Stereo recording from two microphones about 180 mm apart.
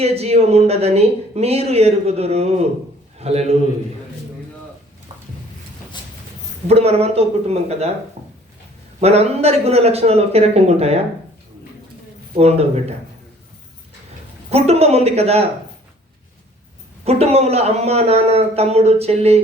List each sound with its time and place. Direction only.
0.0 s a man's voice: 35° right (ahead or behind)
6.7 s speech: 35° right (ahead or behind)
9.0 s speech: 35° right (ahead or behind)
12.4 s speech: 35° right (ahead or behind)
14.5 s speech: 35° right (ahead or behind)
17.0 s speech: 35° right (ahead or behind)